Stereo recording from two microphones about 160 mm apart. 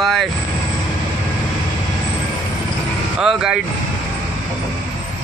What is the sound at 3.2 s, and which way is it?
Speech, 5° right (ahead or behind).